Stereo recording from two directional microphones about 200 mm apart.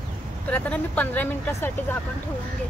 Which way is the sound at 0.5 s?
5° left (ahead or behind).